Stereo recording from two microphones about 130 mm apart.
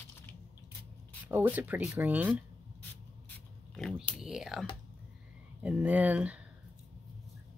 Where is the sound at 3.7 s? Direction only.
5° left (ahead or behind); by 6.4 s 10° right (ahead or behind).